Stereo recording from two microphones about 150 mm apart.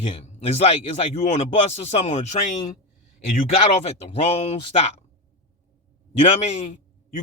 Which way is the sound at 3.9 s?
45° left (ahead or behind).